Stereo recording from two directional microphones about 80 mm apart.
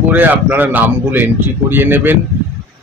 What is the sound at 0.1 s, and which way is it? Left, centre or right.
Speech, right.